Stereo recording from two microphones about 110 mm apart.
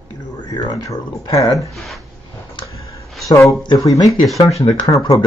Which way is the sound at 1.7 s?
Centre (ahead or behind).